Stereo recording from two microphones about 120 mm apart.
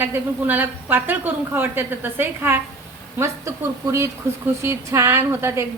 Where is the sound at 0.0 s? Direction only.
20° right (ahead or behind).